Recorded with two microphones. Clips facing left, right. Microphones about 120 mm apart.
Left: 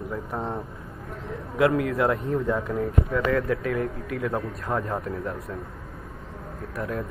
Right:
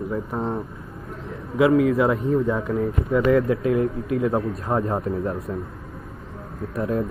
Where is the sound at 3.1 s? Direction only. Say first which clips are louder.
Right 8 dB; 25° right (ahead or behind).